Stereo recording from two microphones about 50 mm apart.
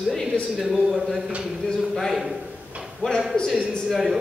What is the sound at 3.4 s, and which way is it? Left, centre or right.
Speech, centre.